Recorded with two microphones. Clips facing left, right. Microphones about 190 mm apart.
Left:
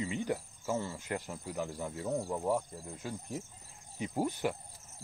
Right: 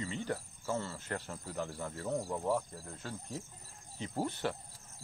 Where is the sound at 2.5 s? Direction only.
20° left (ahead or behind).